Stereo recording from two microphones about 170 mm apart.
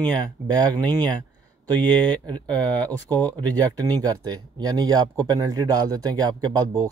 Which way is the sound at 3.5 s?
25° right (ahead or behind).